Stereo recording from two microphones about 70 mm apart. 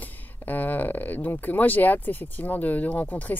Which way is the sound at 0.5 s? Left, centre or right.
Left.